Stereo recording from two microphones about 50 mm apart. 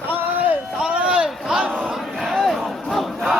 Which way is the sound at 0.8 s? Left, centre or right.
Right.